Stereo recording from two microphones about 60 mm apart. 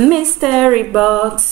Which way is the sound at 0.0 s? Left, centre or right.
Centre.